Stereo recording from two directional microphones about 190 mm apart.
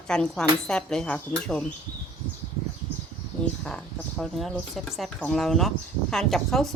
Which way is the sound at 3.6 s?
Centre (ahead or behind).